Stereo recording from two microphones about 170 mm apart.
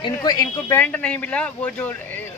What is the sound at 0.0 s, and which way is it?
Speech, 25° left (ahead or behind).